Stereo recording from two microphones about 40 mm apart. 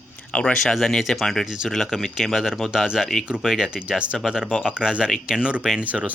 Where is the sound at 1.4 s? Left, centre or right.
Centre.